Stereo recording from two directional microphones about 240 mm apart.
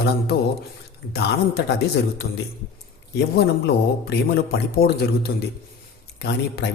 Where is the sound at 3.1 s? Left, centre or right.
Left.